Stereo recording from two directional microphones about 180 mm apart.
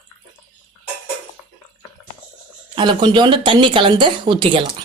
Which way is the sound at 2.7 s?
25° right (ahead or behind).